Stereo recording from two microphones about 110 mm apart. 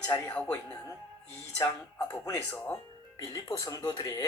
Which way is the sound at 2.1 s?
30° left (ahead or behind).